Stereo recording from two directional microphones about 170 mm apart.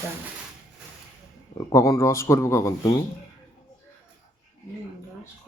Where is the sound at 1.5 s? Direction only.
20° left (ahead or behind).